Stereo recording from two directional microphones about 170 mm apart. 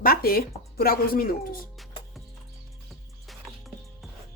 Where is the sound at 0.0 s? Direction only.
60° left (ahead or behind).